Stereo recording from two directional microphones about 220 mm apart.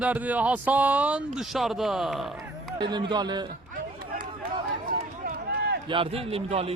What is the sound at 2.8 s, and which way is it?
Speech, 20° right (ahead or behind).